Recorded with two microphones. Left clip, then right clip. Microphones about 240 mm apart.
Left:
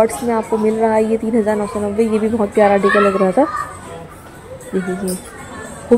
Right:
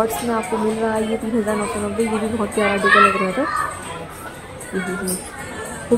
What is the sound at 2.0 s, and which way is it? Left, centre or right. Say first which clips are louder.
Speech: left 6 dB; centre.